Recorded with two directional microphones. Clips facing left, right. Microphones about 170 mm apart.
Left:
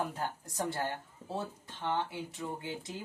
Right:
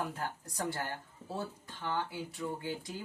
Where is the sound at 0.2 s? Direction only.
25° left (ahead or behind).